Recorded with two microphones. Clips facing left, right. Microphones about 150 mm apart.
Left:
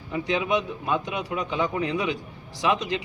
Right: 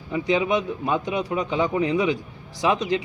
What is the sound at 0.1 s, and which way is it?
A man's voice, 15° right (ahead or behind).